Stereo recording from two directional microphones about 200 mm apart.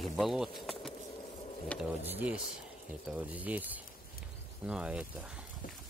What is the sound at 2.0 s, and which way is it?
Speech, 10° right (ahead or behind).